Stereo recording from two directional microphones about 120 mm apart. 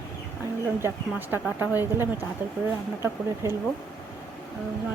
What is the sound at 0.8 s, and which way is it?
Speech, 20° right (ahead or behind).